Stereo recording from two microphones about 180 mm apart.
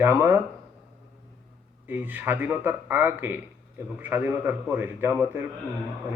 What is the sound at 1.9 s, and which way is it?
Speech, 10° right (ahead or behind).